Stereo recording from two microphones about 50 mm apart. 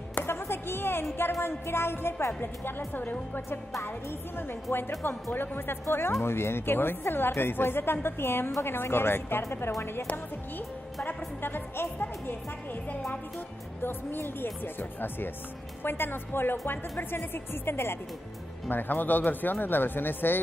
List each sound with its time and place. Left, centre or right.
0.1 s a sound: left
1.4 s a woman's voice: left
2.9 s speech: left
5.0 s a woman's voice: left
11.1 s a woman's voice: left
13.8 s a woman's voice: left
18.7 s speech: left